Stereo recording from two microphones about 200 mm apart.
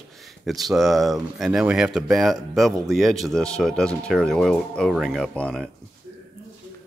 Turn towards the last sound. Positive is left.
turn(degrees=5)  # may be behind; listen again after turning